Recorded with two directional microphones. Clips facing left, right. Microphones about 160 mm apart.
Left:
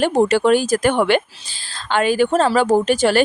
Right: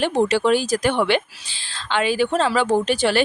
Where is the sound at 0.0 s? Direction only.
45° left (ahead or behind).